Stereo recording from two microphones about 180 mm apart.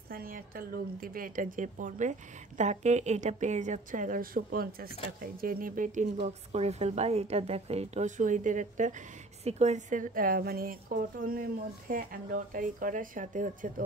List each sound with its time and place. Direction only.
0.1 s a woman's voice: 55° right (ahead or behind)
6.1 s a woman's voice: 35° right (ahead or behind)